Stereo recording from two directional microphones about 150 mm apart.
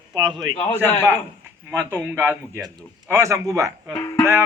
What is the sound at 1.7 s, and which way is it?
Speech, 15° right (ahead or behind).